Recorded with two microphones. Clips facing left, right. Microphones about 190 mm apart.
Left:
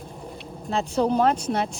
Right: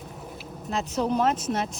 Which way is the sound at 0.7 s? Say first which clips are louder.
Left 4 dB; 35° left (ahead or behind).